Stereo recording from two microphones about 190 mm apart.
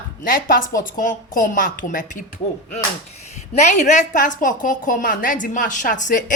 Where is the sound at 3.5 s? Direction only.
40° left (ahead or behind).